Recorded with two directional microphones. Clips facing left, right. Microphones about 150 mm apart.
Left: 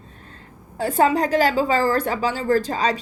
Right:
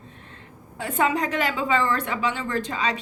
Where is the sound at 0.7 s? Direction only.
35° left (ahead or behind).